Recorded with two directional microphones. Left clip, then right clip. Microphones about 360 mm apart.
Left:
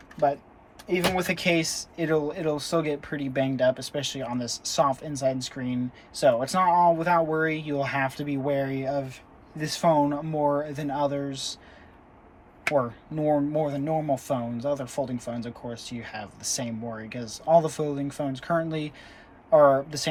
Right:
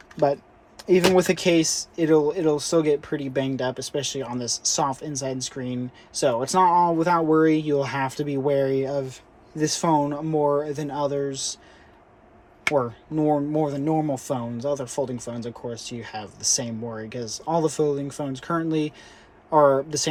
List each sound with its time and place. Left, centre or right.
0.8 s speech: centre
12.7 s speech: centre